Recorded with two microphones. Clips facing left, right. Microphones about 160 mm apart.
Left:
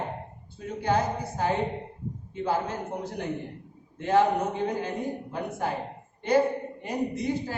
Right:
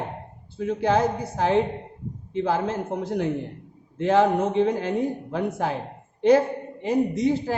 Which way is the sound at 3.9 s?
90° right.